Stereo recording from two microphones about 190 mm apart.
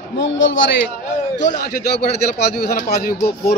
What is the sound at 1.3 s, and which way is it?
A man's voice, 60° left (ahead or behind).